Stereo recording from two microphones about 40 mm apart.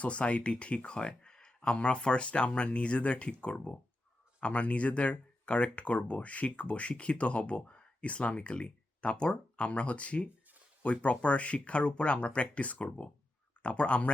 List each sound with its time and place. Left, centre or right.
0.0 s speech: left